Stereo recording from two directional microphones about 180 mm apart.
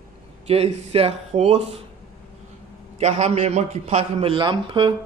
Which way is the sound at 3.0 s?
35° right (ahead or behind).